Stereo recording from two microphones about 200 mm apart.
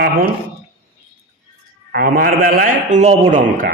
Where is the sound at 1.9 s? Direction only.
45° right (ahead or behind).